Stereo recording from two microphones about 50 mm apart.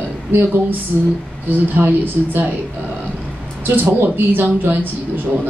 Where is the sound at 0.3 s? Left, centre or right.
Right.